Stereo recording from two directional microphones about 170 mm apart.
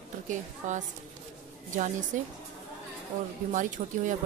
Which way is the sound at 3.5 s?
50° right (ahead or behind).